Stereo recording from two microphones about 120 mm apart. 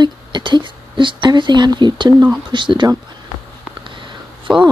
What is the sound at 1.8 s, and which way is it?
Speech, 40° right (ahead or behind).